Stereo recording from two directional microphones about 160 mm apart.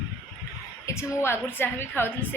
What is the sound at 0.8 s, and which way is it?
A woman's voice, 15° left (ahead or behind).